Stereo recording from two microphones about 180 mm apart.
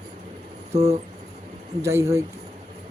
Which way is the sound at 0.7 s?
35° right (ahead or behind).